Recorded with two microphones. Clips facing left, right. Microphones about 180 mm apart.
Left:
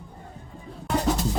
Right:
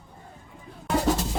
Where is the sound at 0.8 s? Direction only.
5° right (ahead or behind).